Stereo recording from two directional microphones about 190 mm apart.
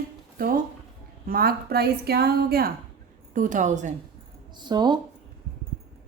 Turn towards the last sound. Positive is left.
turn(degrees=-25)  # may be behind; listen again after turning